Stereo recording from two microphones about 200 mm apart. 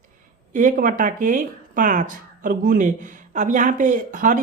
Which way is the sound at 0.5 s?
40° right (ahead or behind).